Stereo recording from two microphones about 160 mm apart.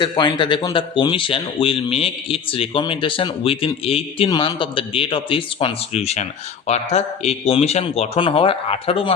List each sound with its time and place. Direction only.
0.0 s speech: 30° left (ahead or behind)